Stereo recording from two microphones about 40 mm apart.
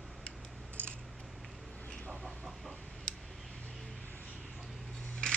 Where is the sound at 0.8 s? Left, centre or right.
Right.